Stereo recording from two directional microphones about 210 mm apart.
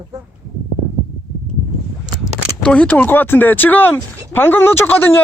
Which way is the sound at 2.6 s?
5° left (ahead or behind).